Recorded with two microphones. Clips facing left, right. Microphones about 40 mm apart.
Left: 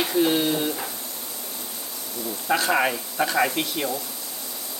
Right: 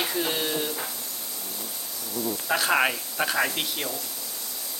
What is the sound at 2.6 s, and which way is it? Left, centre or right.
Speech, centre.